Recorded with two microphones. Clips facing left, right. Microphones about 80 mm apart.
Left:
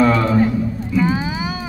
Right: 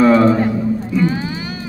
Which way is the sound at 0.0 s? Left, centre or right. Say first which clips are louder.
Right 5 dB; centre.